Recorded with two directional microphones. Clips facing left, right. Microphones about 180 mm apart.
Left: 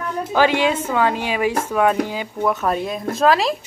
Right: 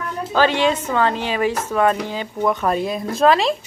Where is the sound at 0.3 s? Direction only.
10° left (ahead or behind).